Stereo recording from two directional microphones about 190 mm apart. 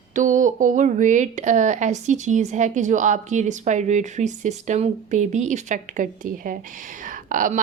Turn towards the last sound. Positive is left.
turn(degrees=-45)  # may be behind; listen again after turning